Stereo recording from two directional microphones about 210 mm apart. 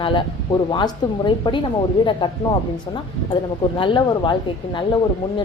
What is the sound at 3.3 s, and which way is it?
Speech, 25° left (ahead or behind).